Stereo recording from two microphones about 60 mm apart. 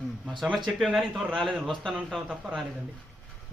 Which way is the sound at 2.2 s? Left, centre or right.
Right.